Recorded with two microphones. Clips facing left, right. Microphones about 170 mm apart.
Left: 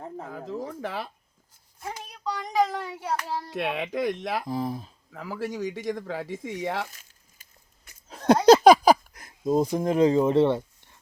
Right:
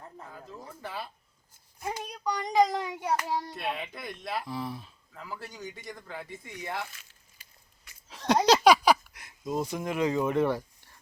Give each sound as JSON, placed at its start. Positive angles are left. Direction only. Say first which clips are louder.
{"t": 0.0, "sound": "speech", "louder": "left 9 dB", "side_deg": 85}
{"t": 1.8, "sound": "a child's voice", "louder": "right 1 dB", "side_deg": -15}
{"t": 3.5, "sound": "speech", "louder": "left 7 dB", "side_deg": 90}
{"t": 4.4, "sound": "speech", "louder": "left 6 dB", "side_deg": 45}
{"t": 5.1, "sound": "speech", "louder": "left 10 dB", "side_deg": 90}
{"t": 6.9, "sound": "a sound", "louder": "even", "side_deg": 40}
{"t": 9.4, "sound": "speech", "louder": "left 8 dB", "side_deg": 35}